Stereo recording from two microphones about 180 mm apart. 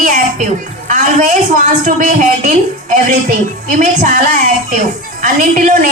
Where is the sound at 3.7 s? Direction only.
50° right (ahead or behind).